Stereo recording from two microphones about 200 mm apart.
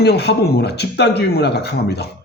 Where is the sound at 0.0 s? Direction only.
55° left (ahead or behind).